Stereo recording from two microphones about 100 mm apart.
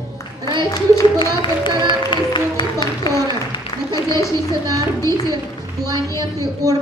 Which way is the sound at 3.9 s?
30° left (ahead or behind).